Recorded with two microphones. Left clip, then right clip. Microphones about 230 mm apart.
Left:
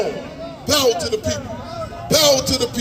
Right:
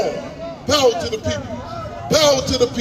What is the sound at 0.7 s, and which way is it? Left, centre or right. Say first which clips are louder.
A man's voice: right 1 dB; left.